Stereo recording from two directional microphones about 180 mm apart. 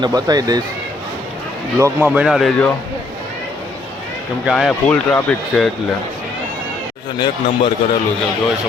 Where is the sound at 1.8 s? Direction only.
10° right (ahead or behind).